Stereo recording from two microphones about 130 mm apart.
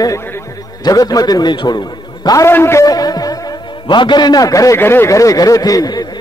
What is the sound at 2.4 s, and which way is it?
A man's voice, 20° left (ahead or behind).